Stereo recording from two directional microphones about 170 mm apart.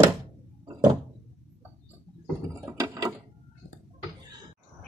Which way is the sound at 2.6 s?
20° right (ahead or behind).